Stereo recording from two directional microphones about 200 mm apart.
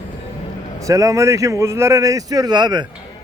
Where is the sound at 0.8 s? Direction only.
15° right (ahead or behind).